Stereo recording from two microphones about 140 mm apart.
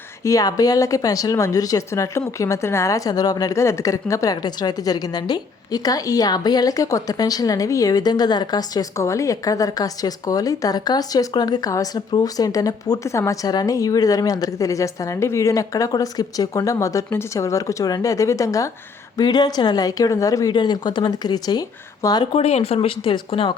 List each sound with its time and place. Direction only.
0.3 s speech: 25° left (ahead or behind)
22.3 s speech: 45° left (ahead or behind)